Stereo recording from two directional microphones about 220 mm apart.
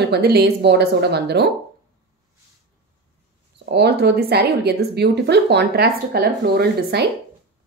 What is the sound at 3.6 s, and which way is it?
A woman's voice, 50° right (ahead or behind).